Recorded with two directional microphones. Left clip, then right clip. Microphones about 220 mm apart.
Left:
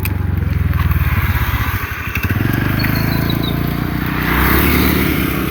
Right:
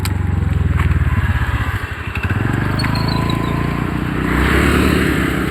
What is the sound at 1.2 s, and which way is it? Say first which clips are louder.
Vehicle: left 2 dB; 40° left (ahead or behind).